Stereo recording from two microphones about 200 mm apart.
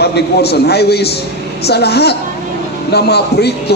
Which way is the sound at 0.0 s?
55° left (ahead or behind).